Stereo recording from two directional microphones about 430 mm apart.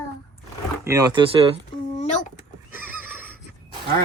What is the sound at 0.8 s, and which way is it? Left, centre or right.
Speech, centre.